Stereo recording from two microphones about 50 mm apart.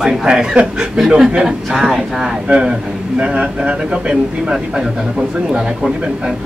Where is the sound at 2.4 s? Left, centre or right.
Centre.